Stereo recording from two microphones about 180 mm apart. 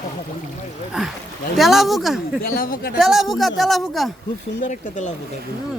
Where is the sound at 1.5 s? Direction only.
Centre (ahead or behind).